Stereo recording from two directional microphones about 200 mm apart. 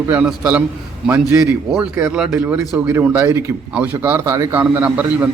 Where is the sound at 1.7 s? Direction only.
5° right (ahead or behind).